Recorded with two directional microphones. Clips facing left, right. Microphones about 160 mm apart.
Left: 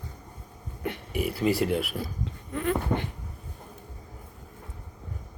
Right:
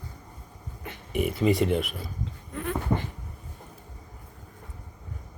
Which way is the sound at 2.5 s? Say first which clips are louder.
Left 2 dB; 75° left (ahead or behind).